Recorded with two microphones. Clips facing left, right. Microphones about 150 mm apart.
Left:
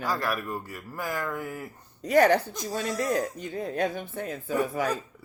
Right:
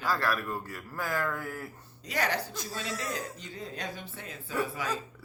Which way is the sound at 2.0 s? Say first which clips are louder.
Left 11 dB; 50° left (ahead or behind).